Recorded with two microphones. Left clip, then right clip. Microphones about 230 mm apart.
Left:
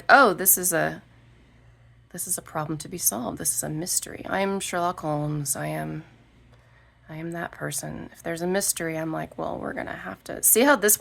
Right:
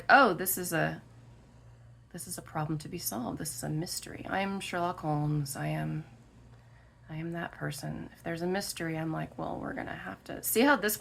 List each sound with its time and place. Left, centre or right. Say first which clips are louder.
0.1 s a woman's voice: left 6 dB; left
2.1 s a woman's voice: left 7 dB; left
7.1 s a woman's voice: left 6 dB; left